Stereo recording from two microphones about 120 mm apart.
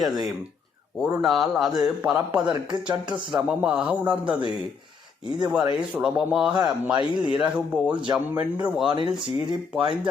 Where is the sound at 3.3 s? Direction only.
5° right (ahead or behind).